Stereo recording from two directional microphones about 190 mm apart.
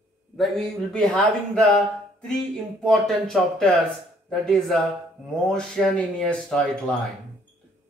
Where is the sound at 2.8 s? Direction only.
Centre (ahead or behind).